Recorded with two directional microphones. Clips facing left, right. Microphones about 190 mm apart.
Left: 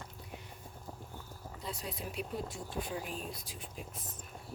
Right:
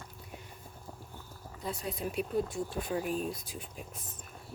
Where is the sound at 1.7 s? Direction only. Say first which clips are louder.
Right 7 dB; 50° right (ahead or behind).